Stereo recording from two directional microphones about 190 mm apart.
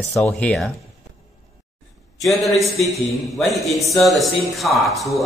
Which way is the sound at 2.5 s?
Centre (ahead or behind).